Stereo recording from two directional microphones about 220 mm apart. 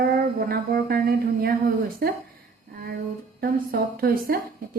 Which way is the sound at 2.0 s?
45° right (ahead or behind).